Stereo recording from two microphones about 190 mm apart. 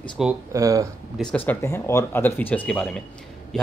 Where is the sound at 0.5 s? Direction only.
15° right (ahead or behind).